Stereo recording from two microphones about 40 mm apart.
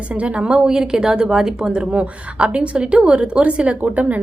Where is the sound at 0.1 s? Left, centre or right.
Right.